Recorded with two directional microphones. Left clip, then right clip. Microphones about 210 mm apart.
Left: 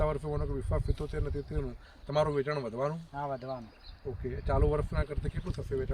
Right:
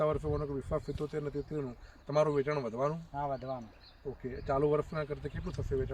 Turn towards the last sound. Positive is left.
turn(degrees=10)  # may be behind; listen again after turning